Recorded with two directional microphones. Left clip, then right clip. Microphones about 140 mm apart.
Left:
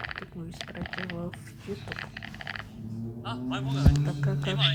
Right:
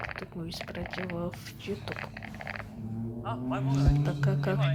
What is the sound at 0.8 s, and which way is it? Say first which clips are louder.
Speech: left 2 dB; 35° left (ahead or behind).